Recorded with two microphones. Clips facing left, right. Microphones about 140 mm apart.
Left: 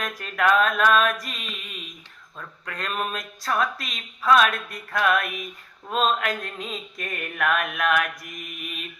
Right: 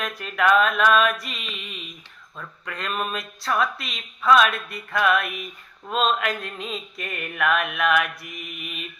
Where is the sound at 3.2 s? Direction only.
40° left (ahead or behind).